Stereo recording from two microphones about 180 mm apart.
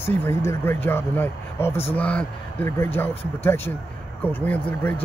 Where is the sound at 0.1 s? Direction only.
10° left (ahead or behind).